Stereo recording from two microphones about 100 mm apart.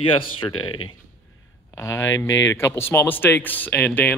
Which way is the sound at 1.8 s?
30° left (ahead or behind).